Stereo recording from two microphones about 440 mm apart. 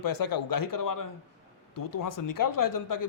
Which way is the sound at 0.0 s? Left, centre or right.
Left.